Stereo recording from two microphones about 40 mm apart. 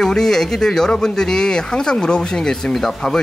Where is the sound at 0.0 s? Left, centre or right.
Centre.